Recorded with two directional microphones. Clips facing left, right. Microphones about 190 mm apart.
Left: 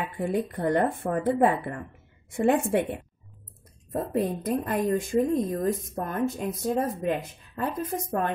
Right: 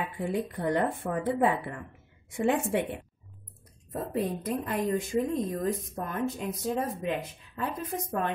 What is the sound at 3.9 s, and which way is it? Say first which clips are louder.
A woman's voice: left 4 dB; 50° left (ahead or behind).